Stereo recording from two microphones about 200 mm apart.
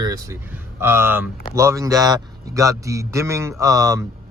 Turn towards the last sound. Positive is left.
turn(degrees=-15)  # may be behind; listen again after turning